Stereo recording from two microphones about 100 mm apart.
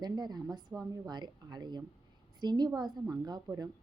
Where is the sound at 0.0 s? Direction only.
45° right (ahead or behind).